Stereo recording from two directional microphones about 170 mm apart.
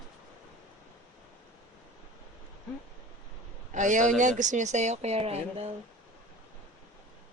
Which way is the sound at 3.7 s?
45° right (ahead or behind).